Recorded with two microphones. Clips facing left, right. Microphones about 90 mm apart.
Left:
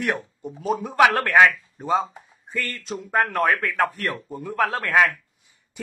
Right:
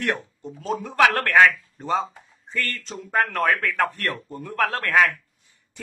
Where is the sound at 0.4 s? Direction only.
10° left (ahead or behind).